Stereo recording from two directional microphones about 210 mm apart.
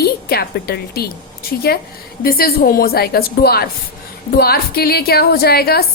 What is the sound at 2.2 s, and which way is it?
A woman's voice, 45° left (ahead or behind).